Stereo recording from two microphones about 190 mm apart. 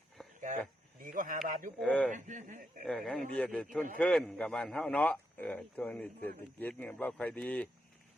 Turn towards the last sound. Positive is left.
turn(degrees=5)  # may be behind; listen again after turning